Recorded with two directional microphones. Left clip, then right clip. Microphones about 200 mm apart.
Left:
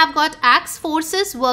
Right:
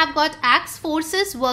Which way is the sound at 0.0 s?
20° left (ahead or behind).